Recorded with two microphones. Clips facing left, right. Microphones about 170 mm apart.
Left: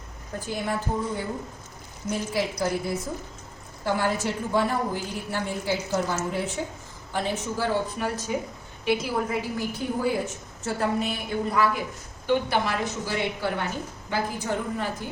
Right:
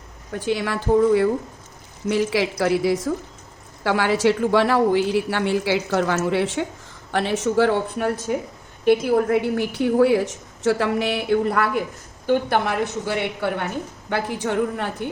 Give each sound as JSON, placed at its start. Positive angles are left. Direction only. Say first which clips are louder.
{"t": 0.3, "sound": "a woman's voice", "louder": "right 5 dB", "side_deg": -90}
{"t": 7.1, "sound": "a woman's voice", "louder": "right 7 dB", "side_deg": -75}
{"t": 12.2, "sound": "a woman's voice", "louder": "right 4 dB", "side_deg": -50}
{"t": 14.1, "sound": "a woman's voice", "louder": "right 4 dB", "side_deg": -80}